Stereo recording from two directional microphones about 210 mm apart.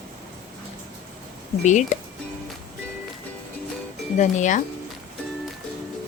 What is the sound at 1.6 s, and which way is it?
Speech, 35° left (ahead or behind).